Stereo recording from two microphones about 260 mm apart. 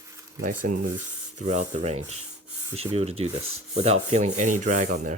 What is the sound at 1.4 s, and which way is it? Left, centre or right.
Speech, right.